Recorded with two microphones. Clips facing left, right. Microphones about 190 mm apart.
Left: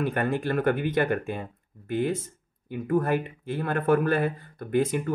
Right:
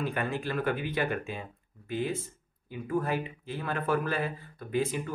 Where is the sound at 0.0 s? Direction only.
50° left (ahead or behind).